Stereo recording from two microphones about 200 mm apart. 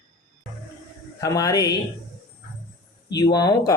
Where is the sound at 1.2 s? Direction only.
15° left (ahead or behind).